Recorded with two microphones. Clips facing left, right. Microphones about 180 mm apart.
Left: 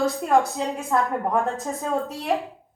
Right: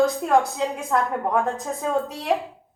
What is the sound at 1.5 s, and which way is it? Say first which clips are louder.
Speech: right 1 dB; centre (ahead or behind).